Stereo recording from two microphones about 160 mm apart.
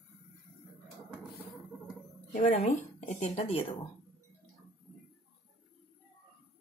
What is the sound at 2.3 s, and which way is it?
Speech, 55° left (ahead or behind).